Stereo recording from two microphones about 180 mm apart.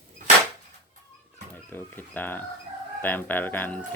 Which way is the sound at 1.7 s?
10° left (ahead or behind).